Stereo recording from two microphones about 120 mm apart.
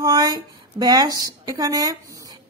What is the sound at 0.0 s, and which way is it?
A woman's voice, 30° right (ahead or behind).